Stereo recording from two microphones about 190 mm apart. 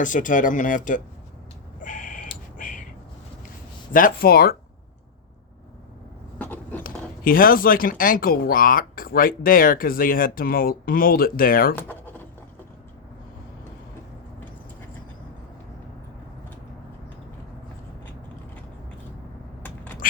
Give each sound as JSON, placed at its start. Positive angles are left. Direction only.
{"t": 0.0, "sound": "speech", "side_deg": 45}
{"t": 1.8, "sound": "a sound", "side_deg": 45}
{"t": 3.9, "sound": "speech", "side_deg": 50}
{"t": 6.4, "sound": "a sound", "side_deg": 10}
{"t": 6.8, "sound": "speech", "side_deg": 50}
{"t": 11.8, "sound": "scratch", "side_deg": 10}
{"t": 19.6, "sound": "mechanisms", "side_deg": 10}